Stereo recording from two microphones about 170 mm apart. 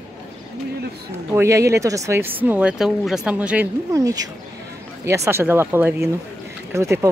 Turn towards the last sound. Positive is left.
turn(degrees=-15)  # may be behind; listen again after turning